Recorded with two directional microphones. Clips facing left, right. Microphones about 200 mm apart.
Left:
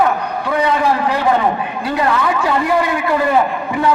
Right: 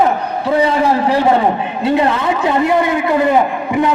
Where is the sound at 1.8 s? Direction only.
25° right (ahead or behind).